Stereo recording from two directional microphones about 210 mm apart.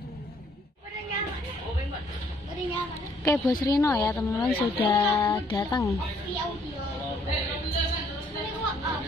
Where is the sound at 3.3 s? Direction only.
15° left (ahead or behind).